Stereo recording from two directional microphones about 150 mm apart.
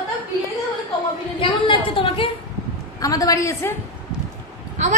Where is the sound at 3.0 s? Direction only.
25° left (ahead or behind).